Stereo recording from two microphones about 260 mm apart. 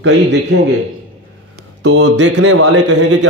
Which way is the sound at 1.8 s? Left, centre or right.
Right.